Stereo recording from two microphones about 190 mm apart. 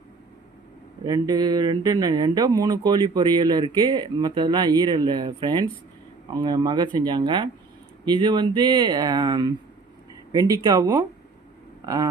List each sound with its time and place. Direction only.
1.0 s speech: 20° right (ahead or behind)